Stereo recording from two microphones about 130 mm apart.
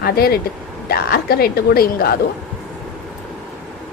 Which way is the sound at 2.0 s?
90° left.